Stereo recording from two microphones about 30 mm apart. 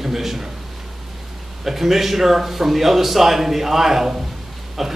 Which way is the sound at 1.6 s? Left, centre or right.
Centre.